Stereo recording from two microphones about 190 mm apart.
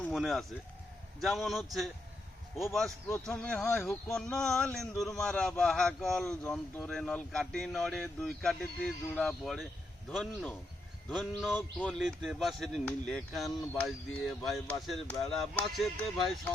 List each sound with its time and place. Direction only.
0.0 s speech: centre (ahead or behind)